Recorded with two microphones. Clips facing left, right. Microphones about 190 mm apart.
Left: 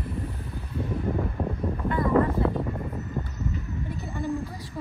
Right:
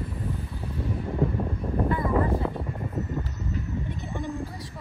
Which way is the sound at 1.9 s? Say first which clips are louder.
Left 3 dB; centre (ahead or behind).